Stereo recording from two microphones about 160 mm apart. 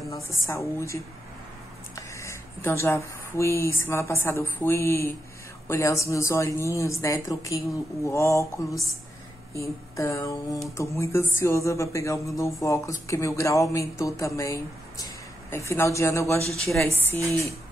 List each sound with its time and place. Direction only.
0.1 s a woman's voice: 20° left (ahead or behind)
9.6 s a woman's voice: 20° left (ahead or behind)
16.5 s a woman's voice: 5° left (ahead or behind)